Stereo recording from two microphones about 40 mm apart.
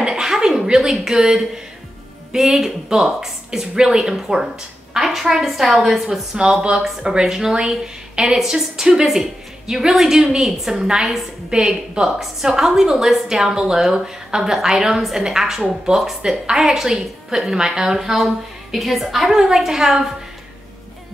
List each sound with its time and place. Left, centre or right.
0.0 s a sound: centre
0.7 s a woman's voice: centre
7.0 s a woman's voice: centre